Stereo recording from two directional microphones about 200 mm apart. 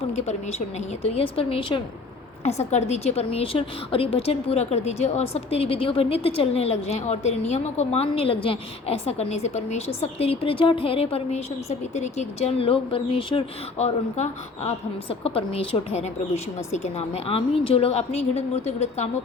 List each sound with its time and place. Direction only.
0.1 s a woman's voice: 35° left (ahead or behind)